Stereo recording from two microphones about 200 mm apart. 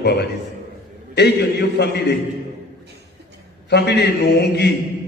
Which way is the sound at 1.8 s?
60° left (ahead or behind).